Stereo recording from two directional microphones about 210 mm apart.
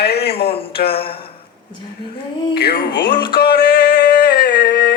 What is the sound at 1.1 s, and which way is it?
Speech, 25° left (ahead or behind).